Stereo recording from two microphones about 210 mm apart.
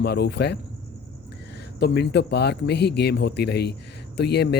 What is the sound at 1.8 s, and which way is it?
Speech, 50° left (ahead or behind).